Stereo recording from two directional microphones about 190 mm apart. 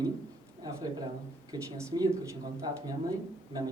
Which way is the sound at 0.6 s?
20° right (ahead or behind).